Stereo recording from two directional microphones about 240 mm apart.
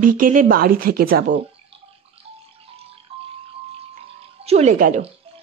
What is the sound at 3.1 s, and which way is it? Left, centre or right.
Music, right.